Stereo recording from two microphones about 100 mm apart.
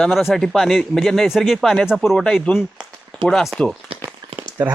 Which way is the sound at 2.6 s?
Centre (ahead or behind).